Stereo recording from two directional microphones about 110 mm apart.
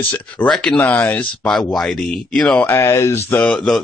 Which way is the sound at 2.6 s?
25° left (ahead or behind).